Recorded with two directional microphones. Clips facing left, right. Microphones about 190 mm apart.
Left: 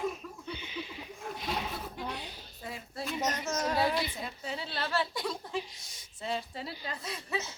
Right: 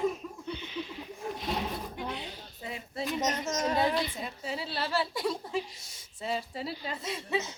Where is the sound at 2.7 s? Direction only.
20° right (ahead or behind).